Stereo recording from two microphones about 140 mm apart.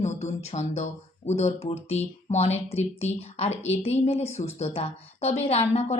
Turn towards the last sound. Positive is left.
turn(degrees=50)  # may be behind; listen again after turning